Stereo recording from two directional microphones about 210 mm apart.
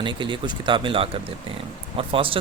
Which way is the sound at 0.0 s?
20° right (ahead or behind).